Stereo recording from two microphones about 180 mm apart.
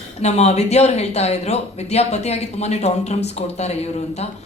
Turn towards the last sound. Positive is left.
turn(degrees=35)  # may be behind; listen again after turning